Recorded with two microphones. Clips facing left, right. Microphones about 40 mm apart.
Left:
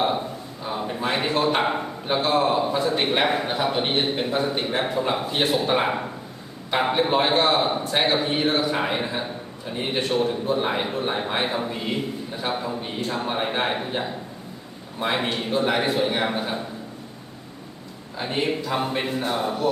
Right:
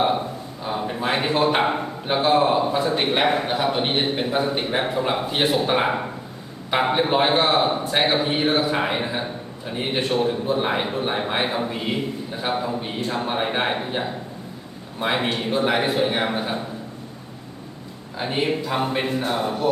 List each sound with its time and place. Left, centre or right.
0.6 s a man's voice: centre
18.2 s a man's voice: centre